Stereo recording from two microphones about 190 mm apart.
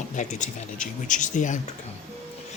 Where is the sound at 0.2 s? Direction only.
40° left (ahead or behind).